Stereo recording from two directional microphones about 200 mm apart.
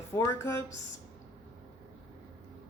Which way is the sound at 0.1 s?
15° left (ahead or behind).